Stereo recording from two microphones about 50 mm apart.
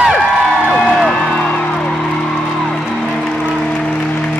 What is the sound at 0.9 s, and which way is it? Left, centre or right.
Music, centre.